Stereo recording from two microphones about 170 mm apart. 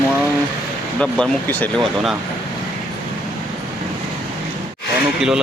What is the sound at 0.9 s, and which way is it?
Speech, 5° left (ahead or behind).